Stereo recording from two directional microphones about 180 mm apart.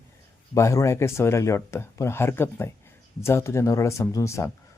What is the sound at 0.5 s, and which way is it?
Speech, 15° left (ahead or behind).